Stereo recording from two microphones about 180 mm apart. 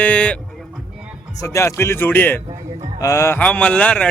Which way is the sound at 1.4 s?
15° left (ahead or behind).